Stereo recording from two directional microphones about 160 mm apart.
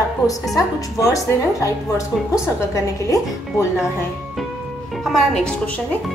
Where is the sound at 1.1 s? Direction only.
20° left (ahead or behind).